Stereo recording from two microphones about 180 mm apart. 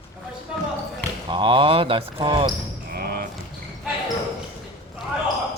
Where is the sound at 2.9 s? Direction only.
55° right (ahead or behind).